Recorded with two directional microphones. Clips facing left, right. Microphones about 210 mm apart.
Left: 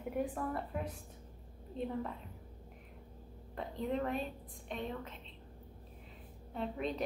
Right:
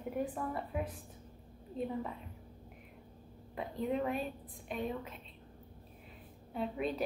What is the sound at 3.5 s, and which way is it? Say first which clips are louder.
A woman's voice: right 2 dB; 5° right (ahead or behind).